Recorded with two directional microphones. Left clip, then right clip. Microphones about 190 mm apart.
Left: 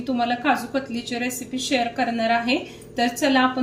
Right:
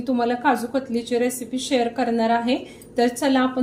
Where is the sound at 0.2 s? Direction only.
20° right (ahead or behind).